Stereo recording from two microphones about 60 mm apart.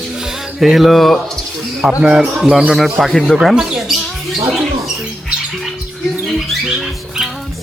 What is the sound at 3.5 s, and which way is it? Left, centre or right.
Speech, centre.